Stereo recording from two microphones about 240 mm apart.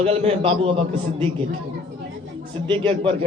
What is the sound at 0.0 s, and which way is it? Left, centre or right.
Speech, right.